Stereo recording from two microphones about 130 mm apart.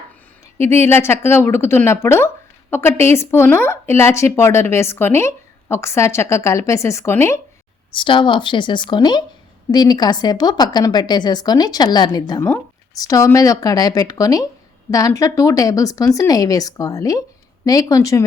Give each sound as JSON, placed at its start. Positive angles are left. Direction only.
{"t": 0.6, "sound": "speech", "side_deg": 20}
{"t": 7.9, "sound": "a woman's voice", "side_deg": 40}